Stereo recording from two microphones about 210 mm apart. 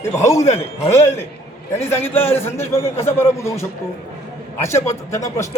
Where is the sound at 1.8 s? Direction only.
10° left (ahead or behind).